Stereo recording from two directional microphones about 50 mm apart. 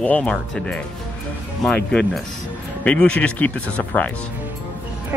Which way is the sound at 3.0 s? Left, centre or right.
Left.